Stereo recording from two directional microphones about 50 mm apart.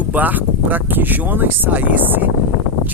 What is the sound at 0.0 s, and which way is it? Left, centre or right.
Speech, right.